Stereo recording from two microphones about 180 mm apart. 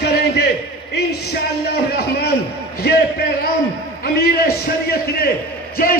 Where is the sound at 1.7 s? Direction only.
60° left (ahead or behind).